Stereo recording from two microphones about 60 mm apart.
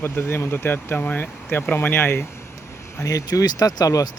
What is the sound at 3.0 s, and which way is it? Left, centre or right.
Speech, left.